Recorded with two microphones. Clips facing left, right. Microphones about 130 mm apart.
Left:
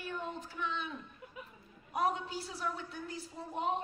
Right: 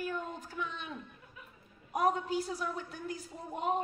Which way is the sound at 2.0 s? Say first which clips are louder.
Right 5 dB; 45° right (ahead or behind).